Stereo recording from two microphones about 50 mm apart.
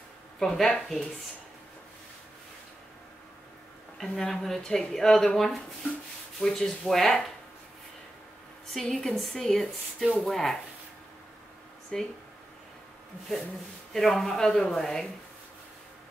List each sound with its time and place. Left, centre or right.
0.4 s speech: centre
4.0 s speech: centre
8.7 s speech: centre
11.9 s speech: centre
13.9 s speech: centre